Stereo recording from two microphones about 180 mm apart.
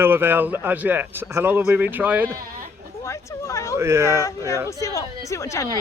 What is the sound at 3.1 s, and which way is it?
Speech, 15° left (ahead or behind).